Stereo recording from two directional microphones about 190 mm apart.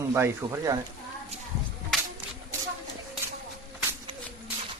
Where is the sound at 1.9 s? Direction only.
Centre (ahead or behind).